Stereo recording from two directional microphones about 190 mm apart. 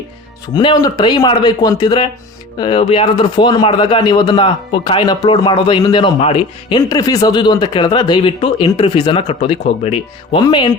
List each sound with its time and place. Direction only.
0.4 s speech: 25° left (ahead or behind)